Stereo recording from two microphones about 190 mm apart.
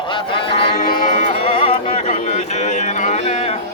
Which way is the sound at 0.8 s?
45° left (ahead or behind).